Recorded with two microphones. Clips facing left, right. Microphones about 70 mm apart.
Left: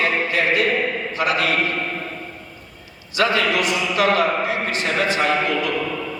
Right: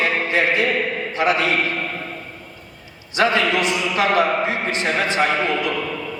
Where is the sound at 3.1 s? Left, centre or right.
Right.